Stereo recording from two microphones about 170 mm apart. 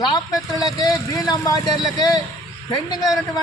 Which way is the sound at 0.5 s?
20° left (ahead or behind).